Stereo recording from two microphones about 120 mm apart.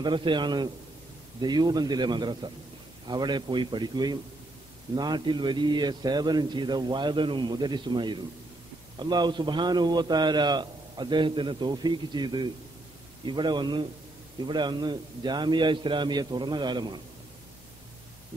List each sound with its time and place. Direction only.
0.0 s a man's voice: 40° right (ahead or behind)